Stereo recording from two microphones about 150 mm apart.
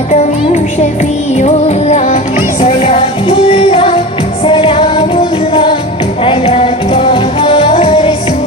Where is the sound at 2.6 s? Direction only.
35° left (ahead or behind).